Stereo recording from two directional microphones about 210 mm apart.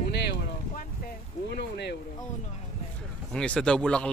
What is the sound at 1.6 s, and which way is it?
Speech, 55° left (ahead or behind).